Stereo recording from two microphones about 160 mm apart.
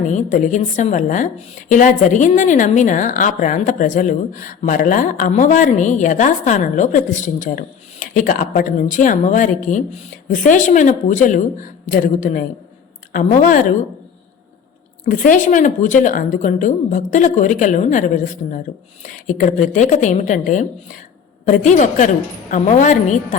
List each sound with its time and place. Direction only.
0.0 s a woman's voice: 45° left (ahead or behind)
15.0 s a woman's voice: 55° left (ahead or behind)